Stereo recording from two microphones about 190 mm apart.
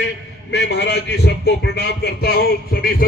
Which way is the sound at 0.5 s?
60° left (ahead or behind).